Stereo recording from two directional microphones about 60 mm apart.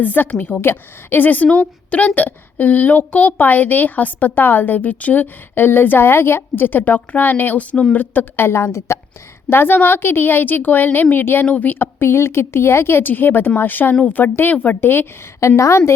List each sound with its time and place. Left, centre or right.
0.0 s a woman's voice: left
9.5 s a woman's voice: left
11.4 s a woman's voice: centre
11.7 s a woman's voice: left
14.8 s a woman's voice: left
15.4 s a woman's voice: left